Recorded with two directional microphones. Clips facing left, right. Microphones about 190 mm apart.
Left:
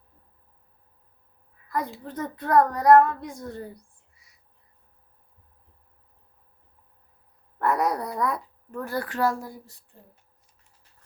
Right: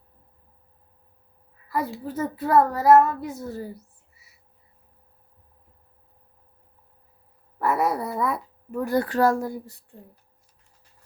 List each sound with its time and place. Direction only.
1.6 s a child's voice: 5° right (ahead or behind)
7.6 s a sound: 5° right (ahead or behind)
9.0 s speech: 40° right (ahead or behind)